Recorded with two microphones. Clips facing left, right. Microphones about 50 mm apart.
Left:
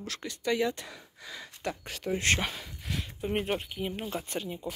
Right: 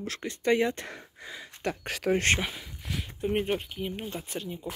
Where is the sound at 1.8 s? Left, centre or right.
Right.